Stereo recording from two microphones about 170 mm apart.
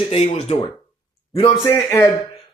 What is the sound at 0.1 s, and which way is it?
Speech, 40° left (ahead or behind).